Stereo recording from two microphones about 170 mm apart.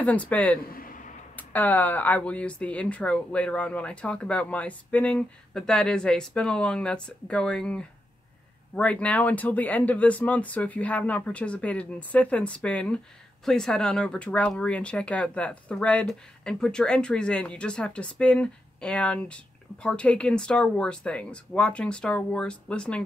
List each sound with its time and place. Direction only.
0.0 s speech: 10° left (ahead or behind)
0.7 s a sound: 55° left (ahead or behind)
1.3 s speech: 10° left (ahead or behind)